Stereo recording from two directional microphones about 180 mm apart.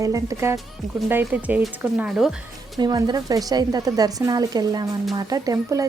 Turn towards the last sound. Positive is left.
turn(degrees=-20)  # may be behind; listen again after turning